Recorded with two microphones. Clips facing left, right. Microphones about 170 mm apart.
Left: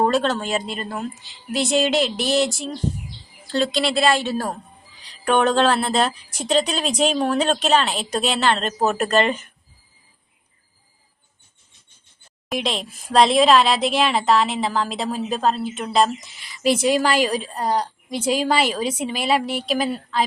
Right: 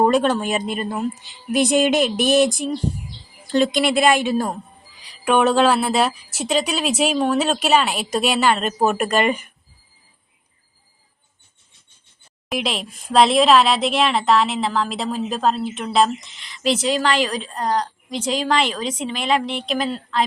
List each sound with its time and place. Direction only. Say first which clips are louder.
0.0 s a woman's voice: right 3 dB; 15° right (ahead or behind)
12.5 s speech: even; 5° right (ahead or behind)